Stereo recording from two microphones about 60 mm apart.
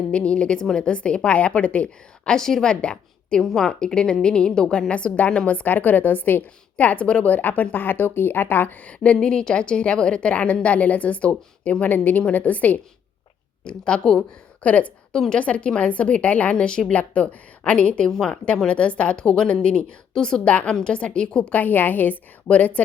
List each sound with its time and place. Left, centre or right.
0.1 s a woman's voice: centre
14.6 s a woman's voice: left
15.1 s a woman's voice: centre
18.1 s a woman's voice: centre
21.6 s a woman's voice: left